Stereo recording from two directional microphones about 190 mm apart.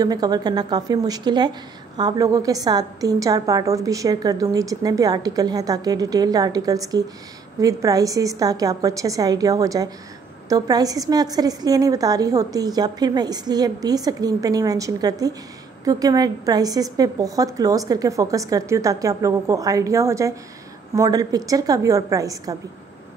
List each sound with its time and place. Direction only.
0.0 s a woman's voice: 20° right (ahead or behind)